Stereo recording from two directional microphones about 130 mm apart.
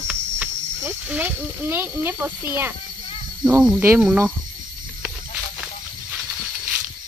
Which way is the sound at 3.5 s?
15° right (ahead or behind).